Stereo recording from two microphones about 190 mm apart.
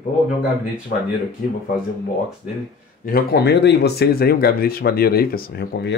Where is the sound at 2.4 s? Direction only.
45° left (ahead or behind).